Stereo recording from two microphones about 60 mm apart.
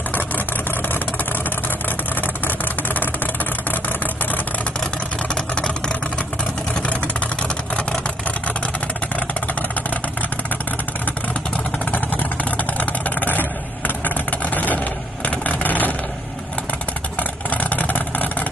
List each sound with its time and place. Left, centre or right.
0.1 s vehicle: left
5.3 s vehicle: centre
9.1 s vehicle: left
11.8 s vehicle: left
17.2 s vehicle: left